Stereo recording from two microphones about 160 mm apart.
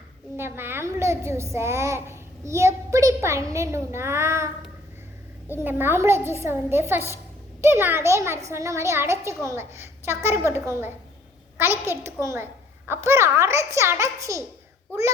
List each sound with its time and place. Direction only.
0.3 s a child's voice: 15° right (ahead or behind)